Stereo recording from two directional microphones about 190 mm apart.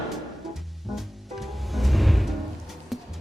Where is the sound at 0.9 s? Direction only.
Centre (ahead or behind).